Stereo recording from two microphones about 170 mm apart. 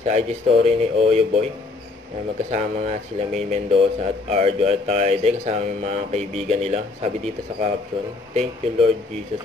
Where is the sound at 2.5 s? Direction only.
45° right (ahead or behind).